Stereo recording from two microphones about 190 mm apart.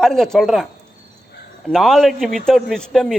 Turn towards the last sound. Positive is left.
turn(degrees=5)  # may be behind; listen again after turning